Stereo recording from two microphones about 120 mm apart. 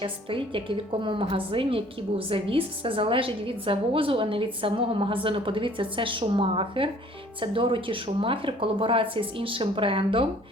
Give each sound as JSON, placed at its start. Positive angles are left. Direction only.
{"t": 0.0, "sound": "a woman's voice", "side_deg": -45}